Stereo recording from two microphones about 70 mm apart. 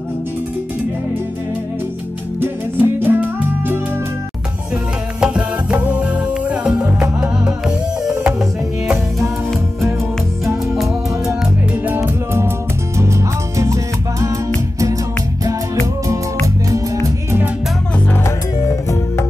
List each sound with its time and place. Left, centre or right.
2.4 s music: right
5.2 s music: centre
11.8 s music: right